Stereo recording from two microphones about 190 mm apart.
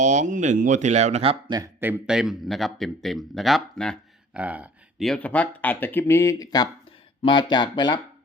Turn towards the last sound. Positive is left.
turn(degrees=25)  # may be behind; listen again after turning